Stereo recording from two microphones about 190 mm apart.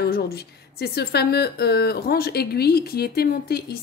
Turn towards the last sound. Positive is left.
turn(degrees=55)  # may be behind; listen again after turning